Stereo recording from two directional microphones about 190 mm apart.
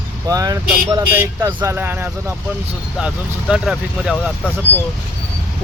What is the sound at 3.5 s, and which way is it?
Speech, centre (ahead or behind).